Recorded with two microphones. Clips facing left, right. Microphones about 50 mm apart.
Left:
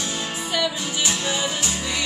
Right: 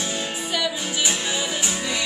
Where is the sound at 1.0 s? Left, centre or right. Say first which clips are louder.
Even; centre.